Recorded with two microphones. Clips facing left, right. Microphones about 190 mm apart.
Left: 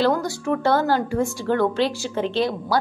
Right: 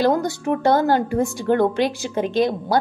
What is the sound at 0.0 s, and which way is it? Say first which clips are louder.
A woman's voice: right 2 dB; 20° right (ahead or behind).